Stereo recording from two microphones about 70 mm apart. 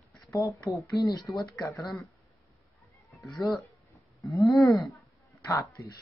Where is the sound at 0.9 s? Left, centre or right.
Left.